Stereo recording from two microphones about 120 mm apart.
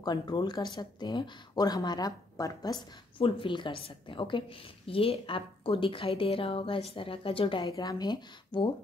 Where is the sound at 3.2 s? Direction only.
45° left (ahead or behind).